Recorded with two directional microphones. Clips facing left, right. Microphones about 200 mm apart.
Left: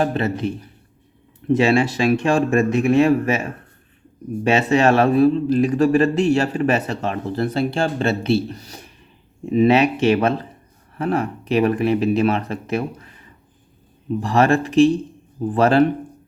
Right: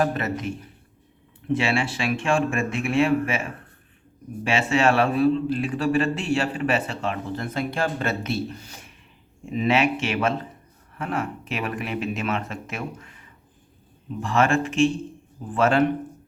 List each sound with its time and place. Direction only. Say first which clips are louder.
0.0 s a man's voice: left 4 dB; 30° left (ahead or behind)